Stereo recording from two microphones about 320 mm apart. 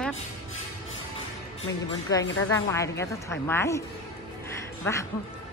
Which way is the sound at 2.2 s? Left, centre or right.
Left.